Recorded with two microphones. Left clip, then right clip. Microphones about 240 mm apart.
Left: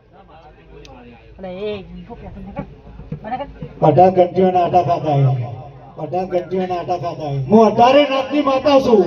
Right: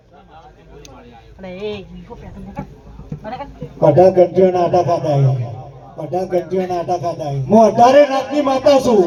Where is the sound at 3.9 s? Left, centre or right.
Right.